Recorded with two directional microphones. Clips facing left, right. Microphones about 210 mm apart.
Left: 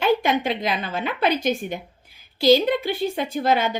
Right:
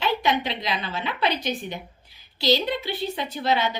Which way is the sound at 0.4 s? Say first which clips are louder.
Left 4 dB; 50° left (ahead or behind).